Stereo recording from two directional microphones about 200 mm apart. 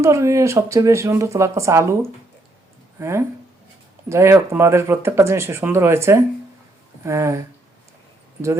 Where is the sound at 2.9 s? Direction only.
15° right (ahead or behind).